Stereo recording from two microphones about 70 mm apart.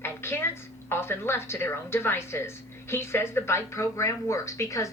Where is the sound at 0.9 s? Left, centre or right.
Left.